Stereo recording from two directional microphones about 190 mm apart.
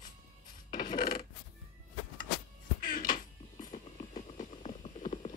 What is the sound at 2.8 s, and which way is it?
Music, 50° left (ahead or behind).